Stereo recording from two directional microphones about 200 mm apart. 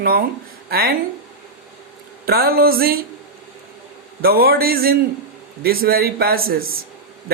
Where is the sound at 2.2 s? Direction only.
50° right (ahead or behind).